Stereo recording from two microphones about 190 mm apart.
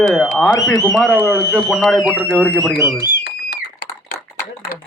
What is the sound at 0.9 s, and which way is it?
A man's voice, 5° left (ahead or behind).